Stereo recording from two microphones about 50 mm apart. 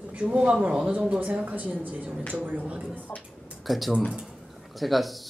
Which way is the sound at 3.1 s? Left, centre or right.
Left.